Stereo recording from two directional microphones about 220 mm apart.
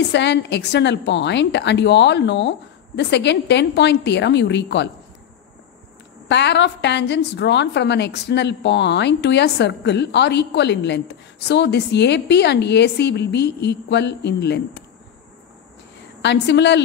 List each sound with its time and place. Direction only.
0.1 s a woman's voice: 50° left (ahead or behind)
6.2 s a woman's voice: 50° left (ahead or behind)
16.2 s a woman's voice: 50° left (ahead or behind)